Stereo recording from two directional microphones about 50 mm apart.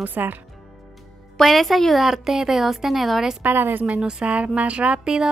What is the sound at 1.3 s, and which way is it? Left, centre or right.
A woman's voice, centre.